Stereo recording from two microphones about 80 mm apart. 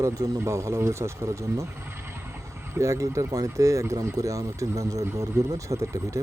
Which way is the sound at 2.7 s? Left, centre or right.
Right.